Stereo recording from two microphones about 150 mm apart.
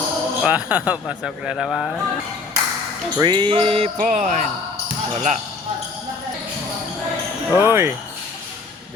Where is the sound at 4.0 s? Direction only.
55° right (ahead or behind).